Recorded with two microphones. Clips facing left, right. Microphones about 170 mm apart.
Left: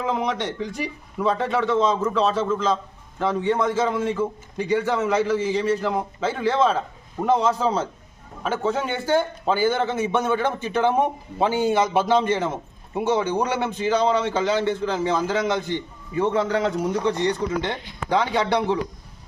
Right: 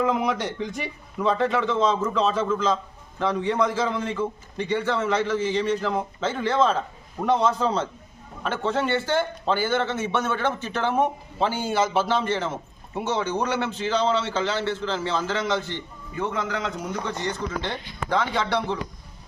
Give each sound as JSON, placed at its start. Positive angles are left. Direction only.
{"t": 0.3, "sound": "a man's voice", "side_deg": 0}
{"t": 16.1, "sound": "speech", "side_deg": 30}
{"t": 17.1, "sound": "a man's voice", "side_deg": 15}